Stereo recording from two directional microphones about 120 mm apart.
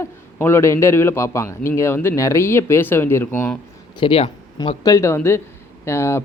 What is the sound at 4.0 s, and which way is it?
Speech, 50° left (ahead or behind).